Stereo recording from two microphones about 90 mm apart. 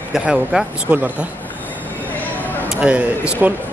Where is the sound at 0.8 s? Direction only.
15° right (ahead or behind).